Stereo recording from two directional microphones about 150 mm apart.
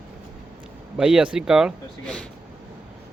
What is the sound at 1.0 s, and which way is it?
Speech, 5° right (ahead or behind).